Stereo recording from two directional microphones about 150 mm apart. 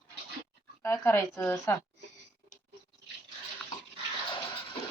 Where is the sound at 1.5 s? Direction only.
20° left (ahead or behind).